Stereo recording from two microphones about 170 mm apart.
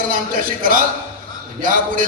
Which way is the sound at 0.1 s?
55° right (ahead or behind).